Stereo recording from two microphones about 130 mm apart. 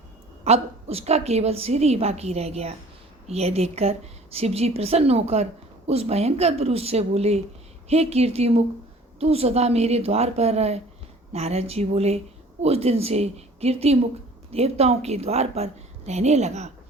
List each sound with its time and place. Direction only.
0.4 s a woman's voice: 50° right (ahead or behind)